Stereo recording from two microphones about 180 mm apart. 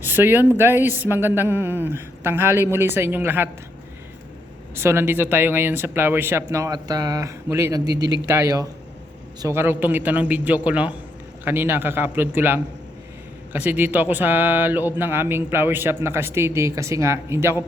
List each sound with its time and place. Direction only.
0.0 s speech: 10° right (ahead or behind)
4.7 s speech: 15° right (ahead or behind)